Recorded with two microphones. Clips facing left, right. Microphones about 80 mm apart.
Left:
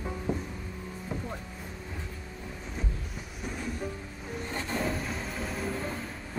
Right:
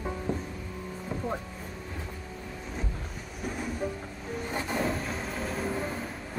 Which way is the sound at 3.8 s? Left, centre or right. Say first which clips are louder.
Right 3 dB; centre.